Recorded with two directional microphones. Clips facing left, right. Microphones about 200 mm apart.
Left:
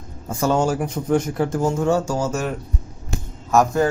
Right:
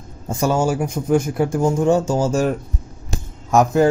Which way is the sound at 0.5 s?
10° right (ahead or behind).